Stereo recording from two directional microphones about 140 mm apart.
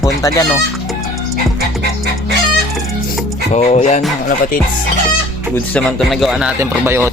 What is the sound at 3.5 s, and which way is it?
Speech, 50° left (ahead or behind).